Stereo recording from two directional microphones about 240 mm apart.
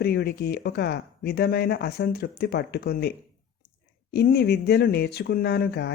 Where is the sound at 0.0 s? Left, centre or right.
Left.